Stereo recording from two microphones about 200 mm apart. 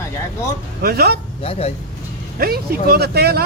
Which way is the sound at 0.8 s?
50° right (ahead or behind).